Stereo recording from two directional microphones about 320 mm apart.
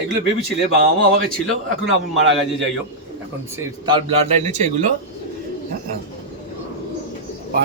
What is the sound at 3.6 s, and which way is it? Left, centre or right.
Speech, centre.